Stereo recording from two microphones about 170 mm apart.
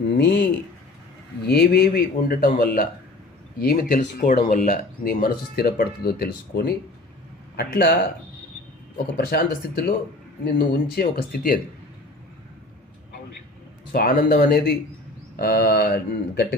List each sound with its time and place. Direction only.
0.2 s speech: 90° left
1.5 s speech: 65° left (ahead or behind)
9.1 s speech: 65° left (ahead or behind)
13.9 s speech: 60° left (ahead or behind)